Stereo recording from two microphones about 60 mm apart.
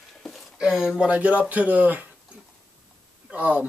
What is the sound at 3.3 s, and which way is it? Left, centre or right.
Speech, right.